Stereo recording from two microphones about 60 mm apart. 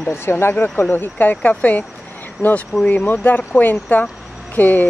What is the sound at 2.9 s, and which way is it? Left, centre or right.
Speech, left.